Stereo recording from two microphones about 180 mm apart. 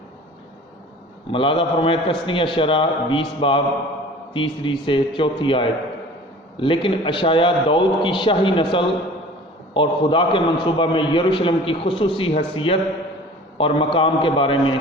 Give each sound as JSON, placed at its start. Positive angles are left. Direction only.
{"t": 1.3, "sound": "a man's voice", "side_deg": 30}